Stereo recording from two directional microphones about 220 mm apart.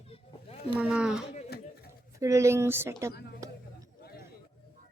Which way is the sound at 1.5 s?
45° left (ahead or behind).